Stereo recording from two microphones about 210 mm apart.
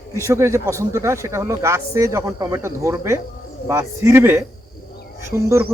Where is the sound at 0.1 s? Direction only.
15° right (ahead or behind).